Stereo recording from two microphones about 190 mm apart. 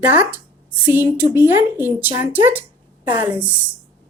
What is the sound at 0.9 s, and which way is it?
A woman's voice, 10° right (ahead or behind).